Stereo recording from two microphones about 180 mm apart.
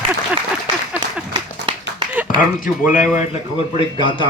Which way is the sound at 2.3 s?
50° left (ahead or behind).